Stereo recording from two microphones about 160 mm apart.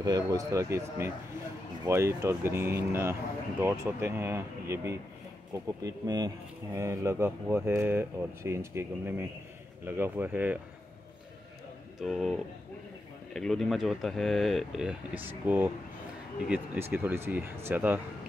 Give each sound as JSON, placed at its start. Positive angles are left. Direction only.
{"t": 0.0, "sound": "speech", "side_deg": -25}
{"t": 1.9, "sound": "speech", "side_deg": -15}
{"t": 12.0, "sound": "speech", "side_deg": 0}